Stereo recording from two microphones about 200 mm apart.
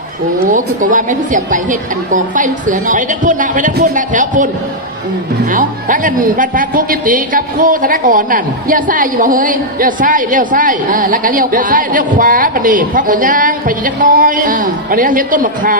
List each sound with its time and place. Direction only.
0.5 s a woman's voice: 40° right (ahead or behind)
5.5 s speech: 40° right (ahead or behind)